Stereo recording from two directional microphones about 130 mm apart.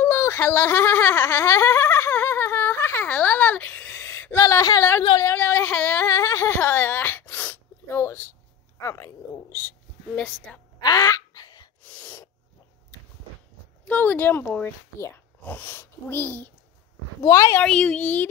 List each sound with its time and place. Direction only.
0.0 s a sound: 20° left (ahead or behind)
4.4 s a woman's voice: 25° left (ahead or behind)
6.0 s whimper: 20° left (ahead or behind)
8.8 s a woman's voice: 20° left (ahead or behind)
10.8 s a sound: 25° left (ahead or behind)
11.9 s sneeze: 15° left (ahead or behind)
13.8 s a woman's voice: 15° left (ahead or behind)
17.6 s speech: 10° left (ahead or behind)